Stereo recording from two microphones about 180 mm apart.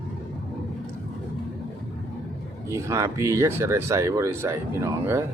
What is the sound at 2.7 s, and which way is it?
Speech, 15° right (ahead or behind).